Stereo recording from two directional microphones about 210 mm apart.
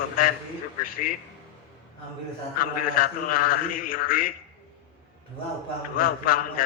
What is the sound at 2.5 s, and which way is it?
A man's voice, 45° left (ahead or behind).